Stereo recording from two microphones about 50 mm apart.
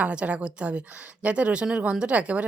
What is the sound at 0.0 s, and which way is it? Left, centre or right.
A woman's voice, right.